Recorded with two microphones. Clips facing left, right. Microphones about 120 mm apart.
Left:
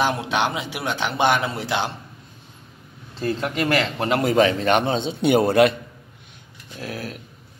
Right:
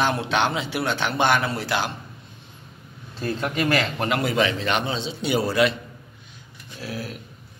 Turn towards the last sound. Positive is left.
turn(degrees=45)  # may be behind; listen again after turning